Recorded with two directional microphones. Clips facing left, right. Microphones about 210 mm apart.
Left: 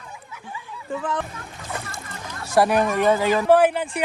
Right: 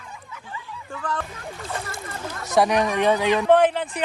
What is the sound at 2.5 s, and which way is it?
Speech, 5° left (ahead or behind).